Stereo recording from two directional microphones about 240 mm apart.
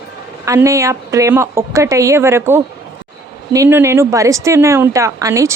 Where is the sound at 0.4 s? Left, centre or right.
Centre.